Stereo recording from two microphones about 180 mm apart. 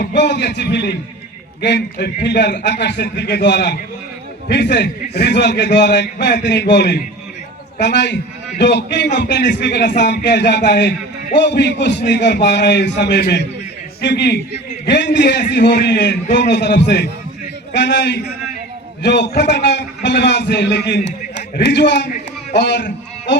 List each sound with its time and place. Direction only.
0.0 s a man's voice: 75° left (ahead or behind)